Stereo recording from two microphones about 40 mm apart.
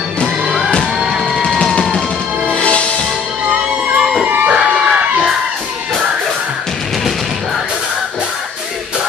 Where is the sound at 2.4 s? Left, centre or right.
Left.